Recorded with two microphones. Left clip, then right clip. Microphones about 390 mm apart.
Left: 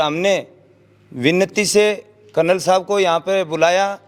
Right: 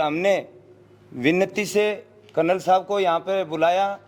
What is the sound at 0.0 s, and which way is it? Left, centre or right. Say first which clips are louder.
A man's voice: left 4 dB; left.